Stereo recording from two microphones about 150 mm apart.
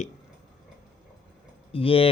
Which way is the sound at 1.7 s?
40° left (ahead or behind).